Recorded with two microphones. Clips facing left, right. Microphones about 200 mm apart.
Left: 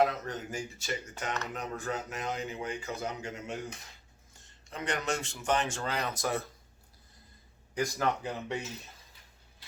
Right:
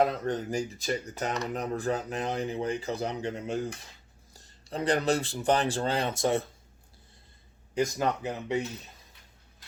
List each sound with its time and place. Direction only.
0.0 s speech: 35° right (ahead or behind)
7.7 s speech: 20° right (ahead or behind)